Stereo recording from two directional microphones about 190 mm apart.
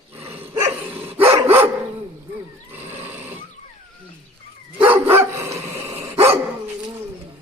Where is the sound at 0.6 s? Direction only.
30° right (ahead or behind).